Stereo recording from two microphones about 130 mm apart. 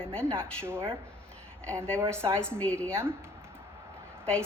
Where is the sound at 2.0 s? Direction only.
20° right (ahead or behind).